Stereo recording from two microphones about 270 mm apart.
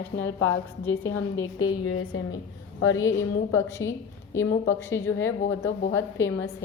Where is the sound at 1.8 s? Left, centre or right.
Left.